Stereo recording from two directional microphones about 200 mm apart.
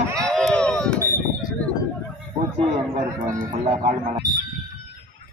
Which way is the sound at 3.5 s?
40° right (ahead or behind).